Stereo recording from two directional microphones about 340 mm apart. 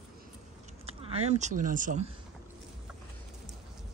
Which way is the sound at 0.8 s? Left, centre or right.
Centre.